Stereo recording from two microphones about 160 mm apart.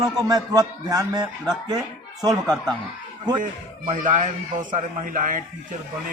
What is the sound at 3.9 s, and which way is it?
A man's voice, 55° right (ahead or behind).